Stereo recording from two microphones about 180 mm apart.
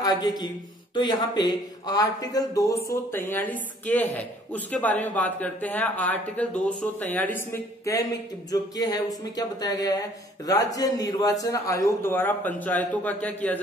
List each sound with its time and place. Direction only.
0.0 s speech: 20° left (ahead or behind)